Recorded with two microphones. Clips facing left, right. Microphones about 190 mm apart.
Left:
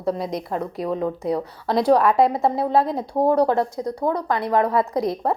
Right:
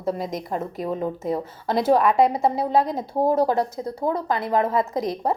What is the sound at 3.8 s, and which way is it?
Speech, 25° right (ahead or behind).